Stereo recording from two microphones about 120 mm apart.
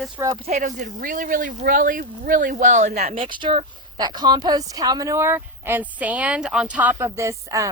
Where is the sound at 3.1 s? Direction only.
45° right (ahead or behind).